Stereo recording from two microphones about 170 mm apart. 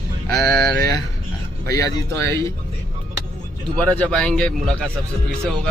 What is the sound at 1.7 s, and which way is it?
Speech, 20° left (ahead or behind).